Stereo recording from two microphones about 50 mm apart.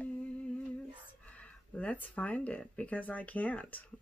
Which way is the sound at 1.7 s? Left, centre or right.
Left.